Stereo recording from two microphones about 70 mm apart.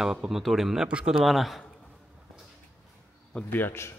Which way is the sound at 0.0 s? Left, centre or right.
Centre.